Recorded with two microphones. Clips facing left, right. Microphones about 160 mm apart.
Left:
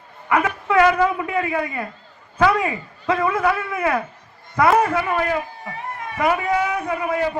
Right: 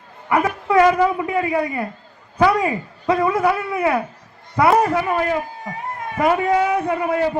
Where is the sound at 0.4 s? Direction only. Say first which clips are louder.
Right 2 dB; 35° right (ahead or behind).